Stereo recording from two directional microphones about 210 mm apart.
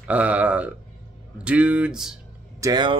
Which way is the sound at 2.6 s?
15° right (ahead or behind).